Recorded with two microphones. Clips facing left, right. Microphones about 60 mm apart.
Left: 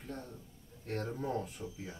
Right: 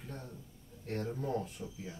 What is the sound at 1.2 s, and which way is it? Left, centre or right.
Speech, centre.